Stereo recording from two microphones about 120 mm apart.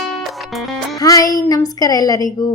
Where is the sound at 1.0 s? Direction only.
30° left (ahead or behind).